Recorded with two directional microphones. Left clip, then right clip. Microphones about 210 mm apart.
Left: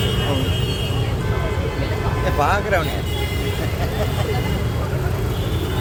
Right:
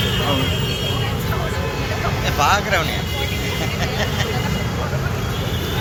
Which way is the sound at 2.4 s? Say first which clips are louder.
Right 2 dB; 50° left (ahead or behind).